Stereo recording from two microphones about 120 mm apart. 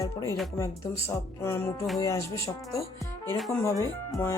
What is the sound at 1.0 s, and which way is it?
Speech, 20° left (ahead or behind).